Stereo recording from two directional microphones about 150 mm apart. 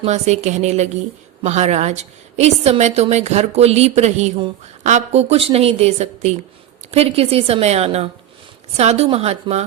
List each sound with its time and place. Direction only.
0.0 s a woman's voice: 50° right (ahead or behind)